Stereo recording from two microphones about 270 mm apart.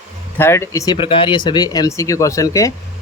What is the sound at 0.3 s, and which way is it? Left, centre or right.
Speech, centre.